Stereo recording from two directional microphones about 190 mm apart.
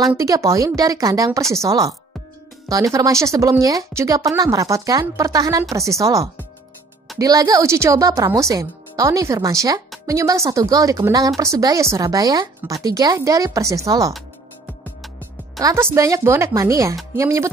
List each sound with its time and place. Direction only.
0.2 s a woman's voice: 15° right (ahead or behind)
15.6 s a woman's voice: 15° right (ahead or behind)